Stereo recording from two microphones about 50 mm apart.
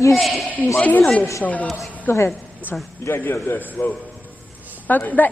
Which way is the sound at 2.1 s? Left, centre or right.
Left.